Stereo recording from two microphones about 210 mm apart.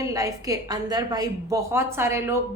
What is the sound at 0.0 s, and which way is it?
A woman's voice, 15° right (ahead or behind).